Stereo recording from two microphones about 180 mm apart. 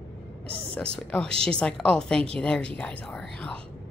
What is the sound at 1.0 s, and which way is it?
A woman's voice, 5° left (ahead or behind).